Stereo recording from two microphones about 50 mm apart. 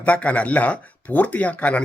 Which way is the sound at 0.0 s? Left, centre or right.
Left.